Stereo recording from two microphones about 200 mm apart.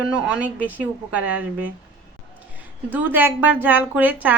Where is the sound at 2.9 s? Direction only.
10° right (ahead or behind).